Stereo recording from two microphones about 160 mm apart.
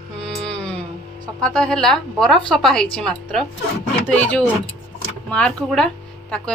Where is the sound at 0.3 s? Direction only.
5° left (ahead or behind).